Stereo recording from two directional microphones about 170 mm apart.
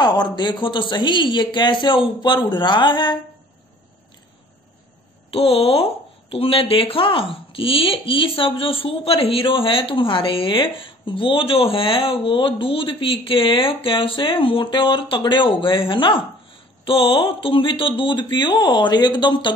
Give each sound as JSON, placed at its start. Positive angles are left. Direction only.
{"t": 0.0, "sound": "speech", "side_deg": 25}
{"t": 5.3, "sound": "speech", "side_deg": 35}